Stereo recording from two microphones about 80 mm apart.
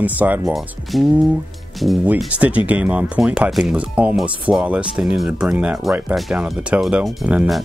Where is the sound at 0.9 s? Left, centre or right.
Centre.